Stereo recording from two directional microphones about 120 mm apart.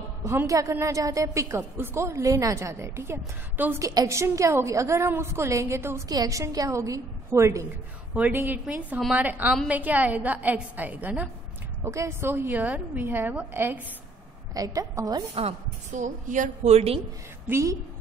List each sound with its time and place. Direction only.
0.2 s a woman's voice: 20° right (ahead or behind)
3.8 s a woman's voice: 30° right (ahead or behind)
14.5 s a woman's voice: 30° right (ahead or behind)
15.3 s a woman's voice: 75° right (ahead or behind); by 17.0 s 60° right (ahead or behind)
17.5 s a woman's voice: 25° right (ahead or behind)